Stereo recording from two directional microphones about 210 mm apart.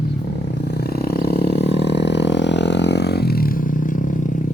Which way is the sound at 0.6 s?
50° left (ahead or behind).